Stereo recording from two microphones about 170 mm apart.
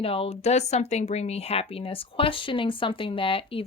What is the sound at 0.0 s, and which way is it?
Speech, 35° left (ahead or behind).